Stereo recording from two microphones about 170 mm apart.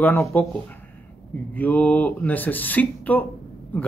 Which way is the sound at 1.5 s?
10° left (ahead or behind).